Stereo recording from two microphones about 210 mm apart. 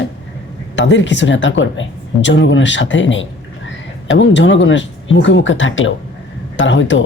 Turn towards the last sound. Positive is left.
turn(degrees=60)  # may be behind; listen again after turning